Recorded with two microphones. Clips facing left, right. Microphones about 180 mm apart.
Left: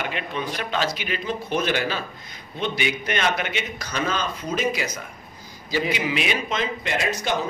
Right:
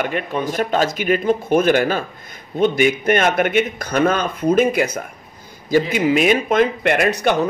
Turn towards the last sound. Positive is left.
turn(degrees=-60)  # may be behind; listen again after turning